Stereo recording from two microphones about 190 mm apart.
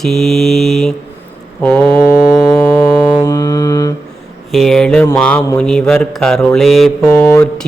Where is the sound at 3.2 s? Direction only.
15° left (ahead or behind).